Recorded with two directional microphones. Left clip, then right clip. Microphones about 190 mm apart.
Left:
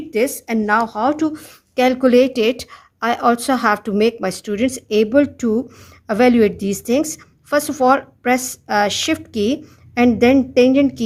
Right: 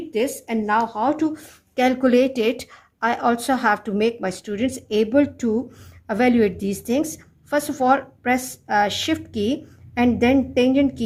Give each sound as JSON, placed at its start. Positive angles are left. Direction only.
{"t": 0.1, "sound": "a woman's voice", "side_deg": 40}